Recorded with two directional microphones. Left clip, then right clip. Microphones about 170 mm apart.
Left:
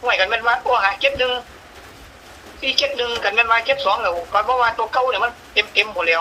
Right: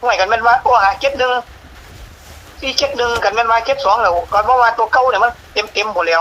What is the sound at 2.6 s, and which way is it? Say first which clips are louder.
Speech: right 2 dB; 50° right (ahead or behind).